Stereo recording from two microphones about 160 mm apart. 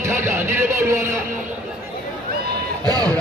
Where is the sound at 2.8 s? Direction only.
25° right (ahead or behind).